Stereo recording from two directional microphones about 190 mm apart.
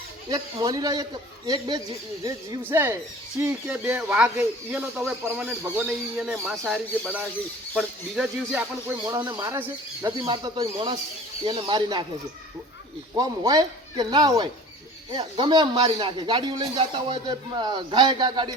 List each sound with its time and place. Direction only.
0.3 s speech: 20° right (ahead or behind); by 9.0 s 5° right (ahead or behind)
9.0 s speech: 15° right (ahead or behind)
13.1 s speech: 20° right (ahead or behind)